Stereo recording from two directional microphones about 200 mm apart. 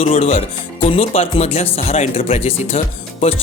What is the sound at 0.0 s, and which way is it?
Music, 30° left (ahead or behind).